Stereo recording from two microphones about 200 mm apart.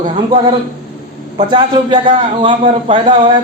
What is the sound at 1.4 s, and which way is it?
A man's voice, 20° right (ahead or behind).